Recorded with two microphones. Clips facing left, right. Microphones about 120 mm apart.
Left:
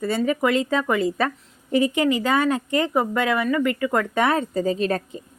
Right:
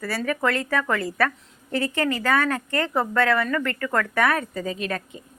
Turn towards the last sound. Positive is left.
turn(degrees=35)  # may be behind; listen again after turning